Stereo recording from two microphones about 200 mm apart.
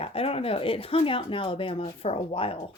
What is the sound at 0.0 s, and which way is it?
Speech, 30° left (ahead or behind).